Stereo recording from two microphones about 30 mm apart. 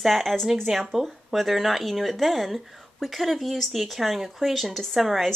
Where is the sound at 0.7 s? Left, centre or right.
Right.